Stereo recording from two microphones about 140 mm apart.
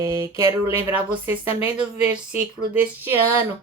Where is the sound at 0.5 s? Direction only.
15° right (ahead or behind).